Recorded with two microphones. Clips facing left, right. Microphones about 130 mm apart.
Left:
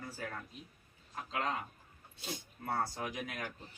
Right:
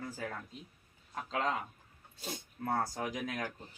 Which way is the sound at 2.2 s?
45° right (ahead or behind).